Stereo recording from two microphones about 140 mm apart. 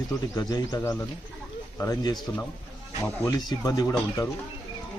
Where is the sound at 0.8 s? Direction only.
15° left (ahead or behind).